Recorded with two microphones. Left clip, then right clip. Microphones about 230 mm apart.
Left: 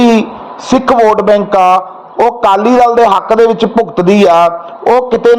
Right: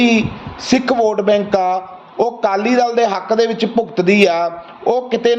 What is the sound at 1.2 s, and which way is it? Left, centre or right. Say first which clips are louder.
A man's voice: left 7 dB; centre.